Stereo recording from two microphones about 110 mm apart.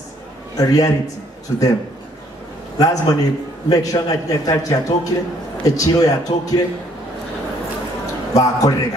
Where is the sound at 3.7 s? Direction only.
35° left (ahead or behind).